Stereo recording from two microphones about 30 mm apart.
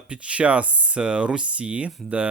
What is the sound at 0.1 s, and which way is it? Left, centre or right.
Speech, right.